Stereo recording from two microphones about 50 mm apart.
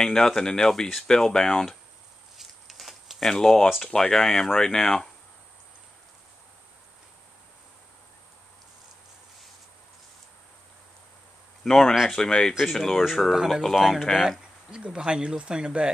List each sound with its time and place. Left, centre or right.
0.0 s speech: centre
2.3 s a sound: centre
3.3 s speech: centre
11.6 s speech: centre
13.3 s speech: centre
14.7 s speech: centre